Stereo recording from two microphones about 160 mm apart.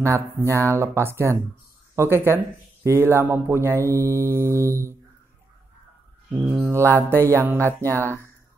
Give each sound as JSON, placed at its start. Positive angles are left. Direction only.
{"t": 0.0, "sound": "speech", "side_deg": -20}
{"t": 6.5, "sound": "speech", "side_deg": -15}